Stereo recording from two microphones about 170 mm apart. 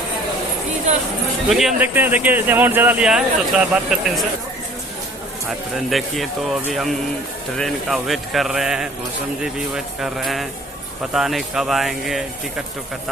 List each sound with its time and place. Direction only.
0.9 s a sound: 45° right (ahead or behind)
1.5 s speech: centre (ahead or behind)
5.5 s speech: centre (ahead or behind)